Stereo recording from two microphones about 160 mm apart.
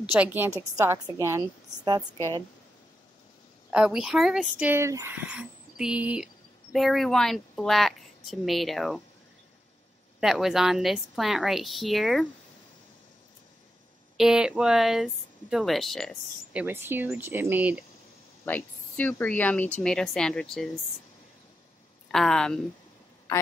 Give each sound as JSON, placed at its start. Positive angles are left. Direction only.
{"t": 0.0, "sound": "a woman's voice", "side_deg": -10}
{"t": 3.7, "sound": "speech", "side_deg": -5}
{"t": 10.2, "sound": "speech", "side_deg": 0}
{"t": 14.1, "sound": "speech", "side_deg": -5}
{"t": 16.5, "sound": "a woman's voice", "side_deg": -15}
{"t": 18.4, "sound": "speech", "side_deg": 10}
{"t": 22.1, "sound": "speech", "side_deg": 5}
{"t": 23.3, "sound": "a sound", "side_deg": 20}